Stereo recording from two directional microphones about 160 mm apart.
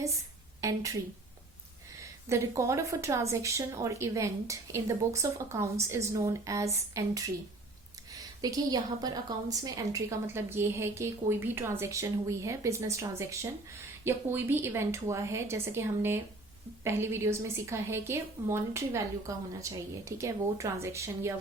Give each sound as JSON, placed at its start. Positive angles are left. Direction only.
{"t": 0.6, "sound": "a woman's voice", "side_deg": -20}
{"t": 2.3, "sound": "a woman's voice", "side_deg": -20}